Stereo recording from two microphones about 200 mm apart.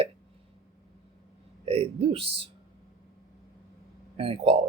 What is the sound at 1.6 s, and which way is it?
Speech, 30° right (ahead or behind).